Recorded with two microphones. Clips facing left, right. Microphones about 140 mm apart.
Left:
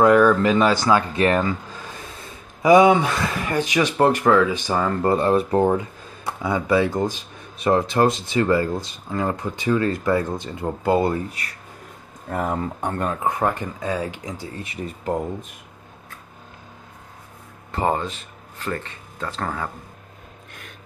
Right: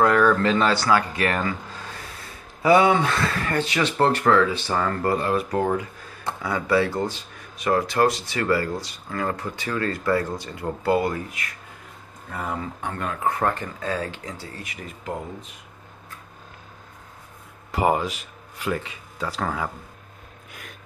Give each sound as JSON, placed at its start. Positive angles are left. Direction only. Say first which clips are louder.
{"t": 0.0, "sound": "speech", "louder": "left 4 dB", "side_deg": 15}
{"t": 12.3, "sound": "speech", "louder": "left 6 dB", "side_deg": 45}
{"t": 13.2, "sound": "speech", "louder": "right 2 dB", "side_deg": 15}
{"t": 17.7, "sound": "speech", "louder": "right 1 dB", "side_deg": -10}